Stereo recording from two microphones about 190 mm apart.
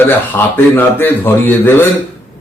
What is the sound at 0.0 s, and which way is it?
A man's voice, 10° left (ahead or behind).